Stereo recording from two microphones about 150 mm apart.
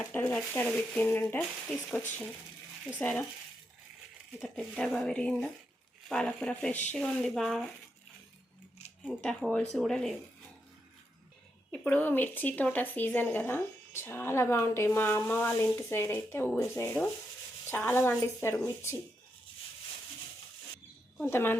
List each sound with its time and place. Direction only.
0.0 s speech: 15° left (ahead or behind)
4.4 s speech: 5° left (ahead or behind)
9.0 s speech: 5° left (ahead or behind)
11.7 s speech: 10° left (ahead or behind)
21.2 s speech: 15° left (ahead or behind)